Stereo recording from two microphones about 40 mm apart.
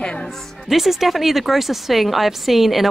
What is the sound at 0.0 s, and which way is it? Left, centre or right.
Music, left.